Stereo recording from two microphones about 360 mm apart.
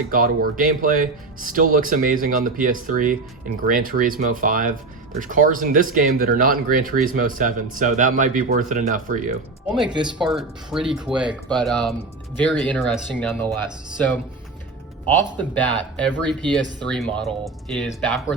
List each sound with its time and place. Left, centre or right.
0.1 s speech: right
10.2 s speech: centre
15.4 s speech: centre